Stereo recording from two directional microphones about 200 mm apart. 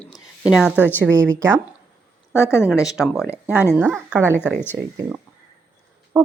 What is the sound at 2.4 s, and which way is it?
Speech, 15° left (ahead or behind).